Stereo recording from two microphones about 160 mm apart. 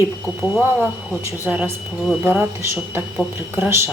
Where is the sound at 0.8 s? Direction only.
10° right (ahead or behind).